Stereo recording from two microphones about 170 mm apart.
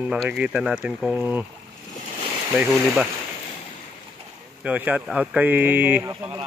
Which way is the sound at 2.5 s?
Centre (ahead or behind).